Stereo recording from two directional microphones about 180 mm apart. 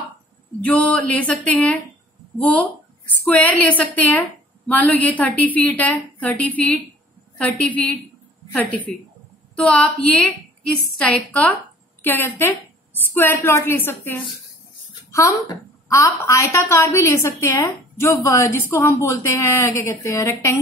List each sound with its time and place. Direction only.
0.7 s a woman's voice: 10° left (ahead or behind)